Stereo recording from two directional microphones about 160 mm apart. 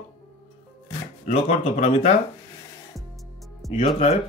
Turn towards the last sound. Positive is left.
turn(degrees=40)  # may be behind; listen again after turning